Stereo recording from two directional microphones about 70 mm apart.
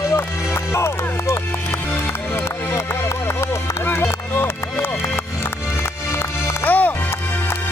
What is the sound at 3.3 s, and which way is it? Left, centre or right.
Music, left.